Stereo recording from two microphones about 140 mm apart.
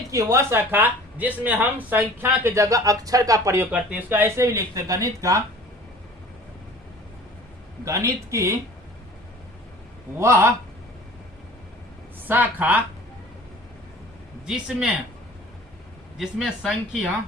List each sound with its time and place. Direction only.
0.1 s speech: 20° right (ahead or behind)
7.9 s speech: 20° right (ahead or behind)
10.2 s speech: 20° right (ahead or behind)
12.3 s speech: 10° right (ahead or behind)
14.4 s speech: 5° right (ahead or behind)
16.1 s speech: centre (ahead or behind)